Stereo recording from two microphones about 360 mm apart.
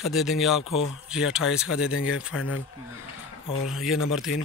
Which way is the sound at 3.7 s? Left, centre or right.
Centre.